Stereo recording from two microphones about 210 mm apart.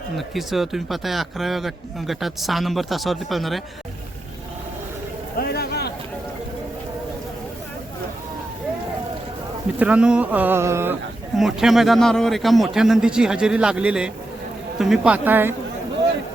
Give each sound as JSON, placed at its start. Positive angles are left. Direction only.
{"t": 0.2, "sound": "a man's voice", "side_deg": 0}
{"t": 5.4, "sound": "a sound", "side_deg": 50}
{"t": 9.7, "sound": "speech", "side_deg": -5}
{"t": 11.3, "sound": "a man's voice", "side_deg": 0}